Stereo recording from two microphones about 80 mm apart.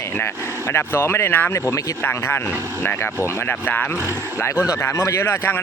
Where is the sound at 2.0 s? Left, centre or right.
Left.